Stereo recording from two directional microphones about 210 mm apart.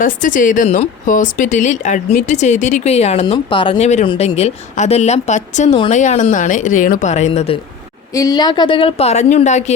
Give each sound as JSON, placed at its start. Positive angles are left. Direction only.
{"t": 0.0, "sound": "speech", "side_deg": 40}
{"t": 8.1, "sound": "a woman's voice", "side_deg": 15}